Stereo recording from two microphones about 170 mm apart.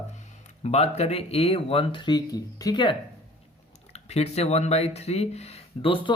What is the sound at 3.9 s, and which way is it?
Speech, 40° left (ahead or behind).